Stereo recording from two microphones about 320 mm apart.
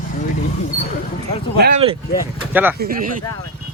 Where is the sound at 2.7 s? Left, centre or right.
Right.